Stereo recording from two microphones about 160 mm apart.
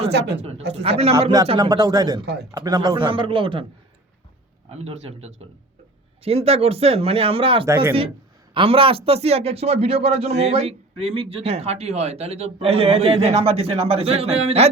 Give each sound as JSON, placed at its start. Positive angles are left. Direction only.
{"t": 0.1, "sound": "a woman's voice", "side_deg": -90}
{"t": 0.8, "sound": "a man's voice", "side_deg": -40}
{"t": 1.5, "sound": "speech", "side_deg": -25}
{"t": 2.2, "sound": "a woman's voice", "side_deg": -90}
{"t": 2.5, "sound": "a man's voice", "side_deg": -20}
{"t": 4.7, "sound": "a man's voice", "side_deg": -40}
{"t": 7.7, "sound": "speech", "side_deg": -15}
{"t": 8.5, "sound": "a man's voice", "side_deg": -35}